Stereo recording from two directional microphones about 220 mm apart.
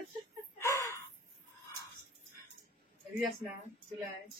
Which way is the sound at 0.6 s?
15° left (ahead or behind).